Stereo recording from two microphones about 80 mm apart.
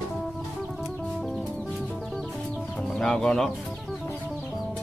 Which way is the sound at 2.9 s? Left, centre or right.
Centre.